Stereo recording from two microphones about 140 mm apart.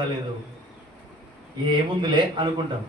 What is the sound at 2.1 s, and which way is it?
Speech, 35° right (ahead or behind).